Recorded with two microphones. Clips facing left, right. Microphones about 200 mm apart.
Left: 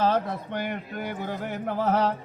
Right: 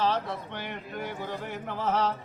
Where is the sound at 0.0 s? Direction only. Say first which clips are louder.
Left 4 dB; 45° left (ahead or behind).